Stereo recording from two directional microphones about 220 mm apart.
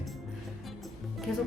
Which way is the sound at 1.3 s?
Centre (ahead or behind).